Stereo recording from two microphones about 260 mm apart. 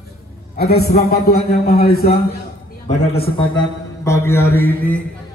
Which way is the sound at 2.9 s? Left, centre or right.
Left.